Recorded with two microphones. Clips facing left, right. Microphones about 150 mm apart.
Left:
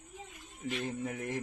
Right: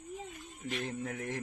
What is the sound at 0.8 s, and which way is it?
Speech, 10° left (ahead or behind).